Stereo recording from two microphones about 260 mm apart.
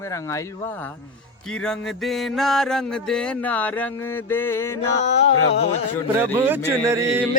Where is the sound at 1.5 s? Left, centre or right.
Centre.